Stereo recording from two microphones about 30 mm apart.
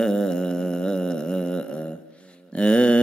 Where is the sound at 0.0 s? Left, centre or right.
Left.